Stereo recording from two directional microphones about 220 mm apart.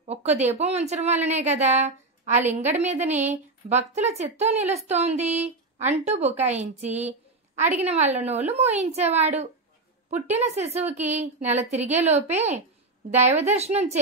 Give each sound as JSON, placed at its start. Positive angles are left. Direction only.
{"t": 0.0, "sound": "a woman's voice", "side_deg": -30}
{"t": 8.0, "sound": "a woman's voice", "side_deg": -10}
{"t": 8.3, "sound": "speech", "side_deg": -30}
{"t": 10.1, "sound": "a woman's voice", "side_deg": -10}
{"t": 10.4, "sound": "a woman's voice", "side_deg": -30}